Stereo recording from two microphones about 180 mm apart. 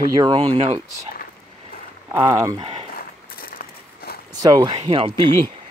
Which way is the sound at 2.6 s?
30° right (ahead or behind).